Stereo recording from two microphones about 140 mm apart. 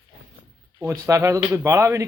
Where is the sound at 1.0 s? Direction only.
20° right (ahead or behind).